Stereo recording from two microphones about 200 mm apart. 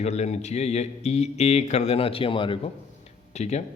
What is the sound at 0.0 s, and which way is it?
Speech, 35° left (ahead or behind).